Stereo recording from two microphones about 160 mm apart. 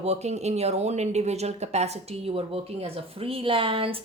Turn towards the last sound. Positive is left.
turn(degrees=-35)  # may be behind; listen again after turning